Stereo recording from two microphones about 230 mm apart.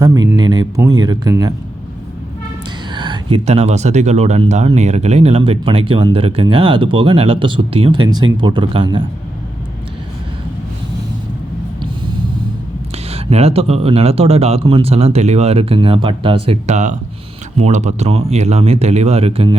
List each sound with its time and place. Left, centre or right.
0.0 s speech: centre
2.9 s speech: centre
13.1 s speech: right